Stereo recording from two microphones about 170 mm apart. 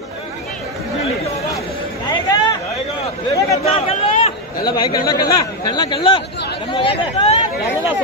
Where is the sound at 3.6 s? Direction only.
35° left (ahead or behind).